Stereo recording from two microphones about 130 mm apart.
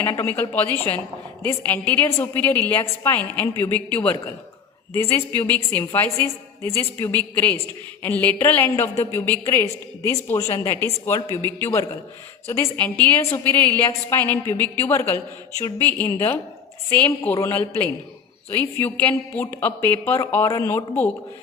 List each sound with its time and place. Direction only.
0.0 s a woman's voice: 20° left (ahead or behind)